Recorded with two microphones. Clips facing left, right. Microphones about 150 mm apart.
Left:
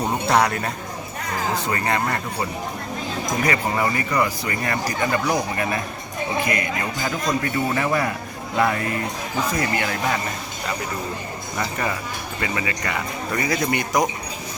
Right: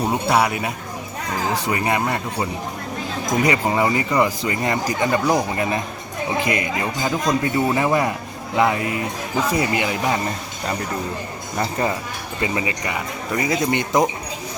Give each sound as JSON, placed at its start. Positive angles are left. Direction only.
{"t": 0.0, "sound": "speech", "side_deg": -5}
{"t": 11.5, "sound": "speech", "side_deg": -30}